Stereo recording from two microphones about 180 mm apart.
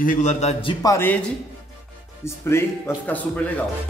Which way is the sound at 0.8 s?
10° left (ahead or behind).